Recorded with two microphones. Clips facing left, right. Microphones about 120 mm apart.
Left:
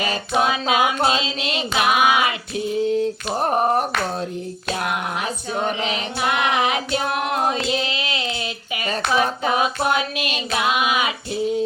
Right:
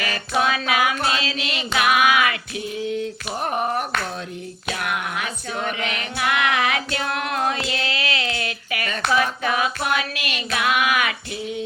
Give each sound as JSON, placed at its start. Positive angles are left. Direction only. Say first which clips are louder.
{"t": 0.0, "sound": "female singing", "louder": "left 2 dB", "side_deg": 25}
{"t": 2.9, "sound": "a sound", "louder": "left 5 dB", "side_deg": 35}
{"t": 4.7, "sound": "female singing", "louder": "left 2 dB", "side_deg": 30}
{"t": 5.5, "sound": "child singing", "louder": "left 3 dB", "side_deg": 30}
{"t": 7.7, "sound": "female singing", "louder": "left 2 dB", "side_deg": 20}